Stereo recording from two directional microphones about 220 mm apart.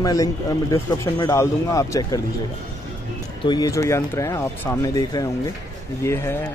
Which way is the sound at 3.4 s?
15° left (ahead or behind).